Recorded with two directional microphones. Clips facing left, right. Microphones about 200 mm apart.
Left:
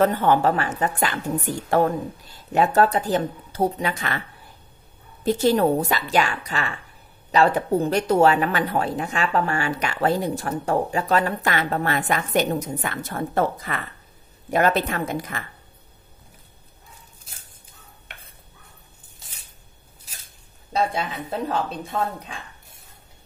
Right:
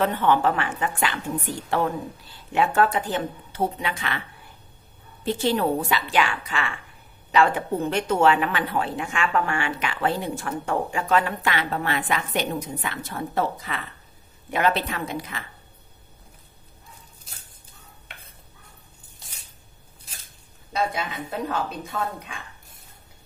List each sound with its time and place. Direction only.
0.0 s speech: 40° left (ahead or behind)
5.2 s a woman's voice: 40° left (ahead or behind)
20.7 s a woman's voice: 30° left (ahead or behind)